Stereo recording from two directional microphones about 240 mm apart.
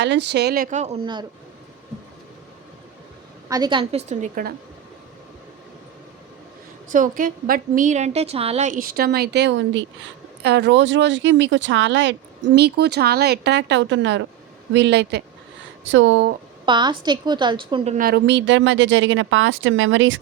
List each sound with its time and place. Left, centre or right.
0.0 s a woman's voice: right
3.5 s a woman's voice: centre; by 4.5 s right
6.9 s a woman's voice: right
16.6 s a woman's voice: centre
17.9 s speech: right